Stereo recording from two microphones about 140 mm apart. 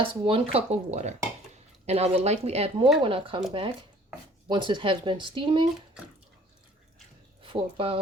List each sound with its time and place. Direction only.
0.0 s speech: 40° right (ahead or behind)
4.4 s speech: 35° right (ahead or behind)
7.4 s speech: 40° right (ahead or behind)